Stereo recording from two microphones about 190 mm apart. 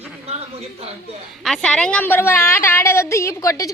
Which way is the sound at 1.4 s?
5° left (ahead or behind).